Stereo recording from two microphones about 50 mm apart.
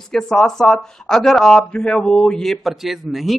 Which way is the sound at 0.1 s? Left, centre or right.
Centre.